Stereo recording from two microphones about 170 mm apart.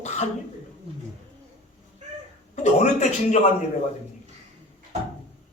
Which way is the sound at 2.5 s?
45° left (ahead or behind).